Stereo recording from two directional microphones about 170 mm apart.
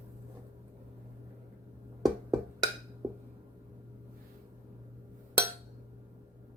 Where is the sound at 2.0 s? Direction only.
Centre (ahead or behind).